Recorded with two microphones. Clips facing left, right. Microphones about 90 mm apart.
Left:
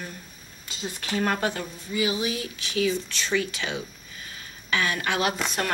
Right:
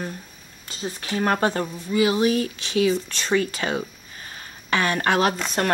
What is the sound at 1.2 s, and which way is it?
A woman's voice, 40° right (ahead or behind).